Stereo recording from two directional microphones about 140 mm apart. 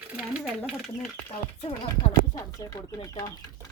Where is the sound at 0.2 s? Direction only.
5° right (ahead or behind).